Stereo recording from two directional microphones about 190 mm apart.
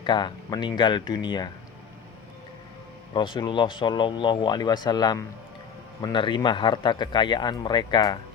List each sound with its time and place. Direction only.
0.0 s a man's voice: 25° left (ahead or behind)
3.1 s a man's voice: 25° left (ahead or behind)